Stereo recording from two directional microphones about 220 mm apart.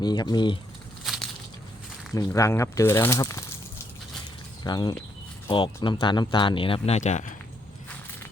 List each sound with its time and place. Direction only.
0.0 s speech: 20° left (ahead or behind)
1.0 s crushing: centre (ahead or behind)
2.1 s speech: 15° left (ahead or behind)
4.6 s speech: 20° left (ahead or behind)